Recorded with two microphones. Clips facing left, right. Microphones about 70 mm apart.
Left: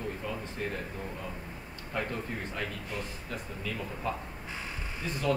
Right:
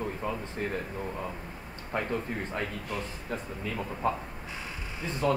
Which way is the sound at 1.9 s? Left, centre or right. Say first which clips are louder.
Right 2 dB; right.